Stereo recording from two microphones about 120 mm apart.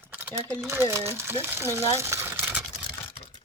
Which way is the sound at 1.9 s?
25° right (ahead or behind).